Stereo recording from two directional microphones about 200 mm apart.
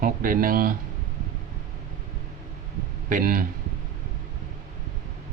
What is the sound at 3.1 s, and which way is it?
Speech, 45° right (ahead or behind).